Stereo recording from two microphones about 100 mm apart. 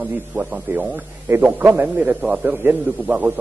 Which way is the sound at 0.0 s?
10° right (ahead or behind).